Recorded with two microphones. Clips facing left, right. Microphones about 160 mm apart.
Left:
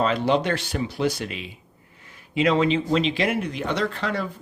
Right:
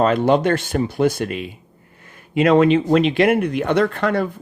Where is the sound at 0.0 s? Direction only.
50° right (ahead or behind).